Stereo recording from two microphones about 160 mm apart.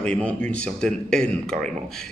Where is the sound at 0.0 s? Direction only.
10° left (ahead or behind).